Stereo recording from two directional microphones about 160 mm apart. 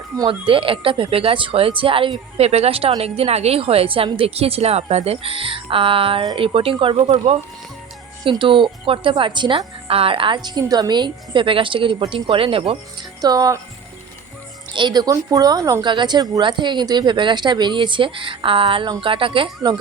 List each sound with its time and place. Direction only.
0.3 s a woman's voice: 35° right (ahead or behind)
13.2 s speech: 25° right (ahead or behind)
14.8 s speech: 25° right (ahead or behind)